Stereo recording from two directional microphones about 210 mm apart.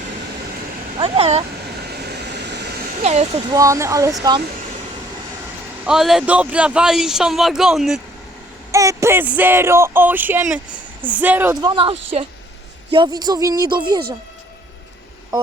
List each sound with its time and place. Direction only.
0.9 s speech: 25° right (ahead or behind)
2.5 s a sound: 55° right (ahead or behind)
3.0 s speech: 30° right (ahead or behind)
3.5 s speech: 15° right (ahead or behind)
5.8 s a man's voice: centre (ahead or behind)
8.7 s speech: 15° right (ahead or behind)
11.7 s speech: 25° right (ahead or behind)